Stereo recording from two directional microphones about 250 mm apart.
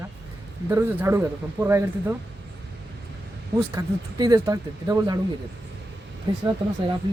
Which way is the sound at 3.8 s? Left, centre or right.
Centre.